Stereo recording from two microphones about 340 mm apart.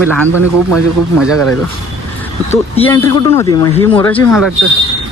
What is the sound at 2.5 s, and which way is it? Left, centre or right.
Speech, centre.